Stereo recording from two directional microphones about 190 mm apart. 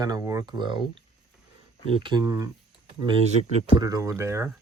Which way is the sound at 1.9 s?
25° right (ahead or behind).